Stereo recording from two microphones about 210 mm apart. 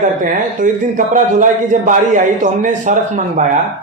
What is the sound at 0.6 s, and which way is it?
A man's voice, 40° right (ahead or behind).